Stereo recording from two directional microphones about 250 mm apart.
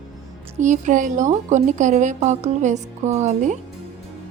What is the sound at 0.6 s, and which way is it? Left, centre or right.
A woman's voice, right.